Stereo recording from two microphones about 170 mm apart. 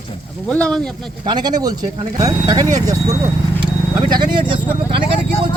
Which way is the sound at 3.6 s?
25° right (ahead or behind).